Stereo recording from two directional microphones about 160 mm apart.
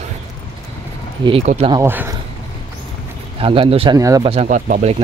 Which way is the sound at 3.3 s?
35° right (ahead or behind).